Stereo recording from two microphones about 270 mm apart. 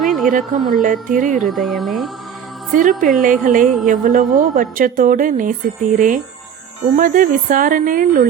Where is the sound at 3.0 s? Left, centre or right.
Right.